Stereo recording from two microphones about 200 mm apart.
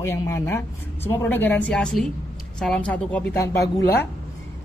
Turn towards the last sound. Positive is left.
turn(degrees=10)  # may be behind; listen again after turning